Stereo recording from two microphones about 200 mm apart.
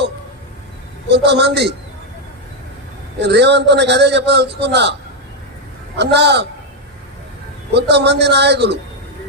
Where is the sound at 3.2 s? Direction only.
55° right (ahead or behind).